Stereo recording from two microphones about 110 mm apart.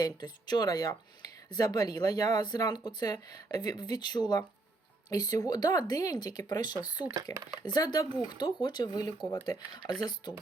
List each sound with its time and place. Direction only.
0.0 s speech: 40° left (ahead or behind)